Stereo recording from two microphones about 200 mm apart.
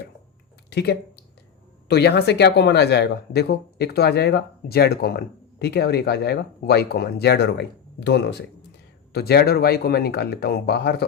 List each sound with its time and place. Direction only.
0.7 s speech: 55° left (ahead or behind)